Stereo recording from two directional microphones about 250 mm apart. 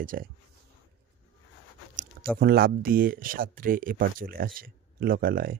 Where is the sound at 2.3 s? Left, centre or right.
Right.